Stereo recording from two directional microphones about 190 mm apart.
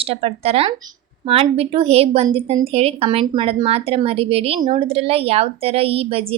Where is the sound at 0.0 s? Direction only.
30° right (ahead or behind).